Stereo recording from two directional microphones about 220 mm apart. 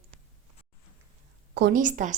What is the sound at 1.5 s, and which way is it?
Speech, 40° right (ahead or behind).